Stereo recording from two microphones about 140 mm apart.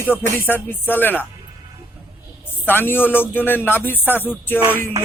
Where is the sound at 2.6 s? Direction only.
15° left (ahead or behind).